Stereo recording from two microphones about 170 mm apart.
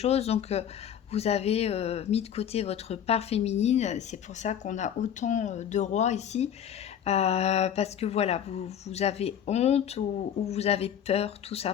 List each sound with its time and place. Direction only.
0.0 s speech: 40° left (ahead or behind)